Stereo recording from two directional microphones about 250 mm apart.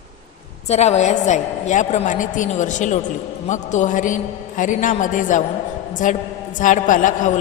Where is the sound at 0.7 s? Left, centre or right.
Left.